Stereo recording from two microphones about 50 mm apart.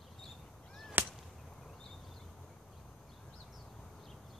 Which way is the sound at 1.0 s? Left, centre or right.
Right.